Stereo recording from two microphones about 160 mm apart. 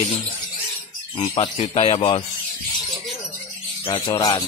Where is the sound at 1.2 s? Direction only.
35° left (ahead or behind).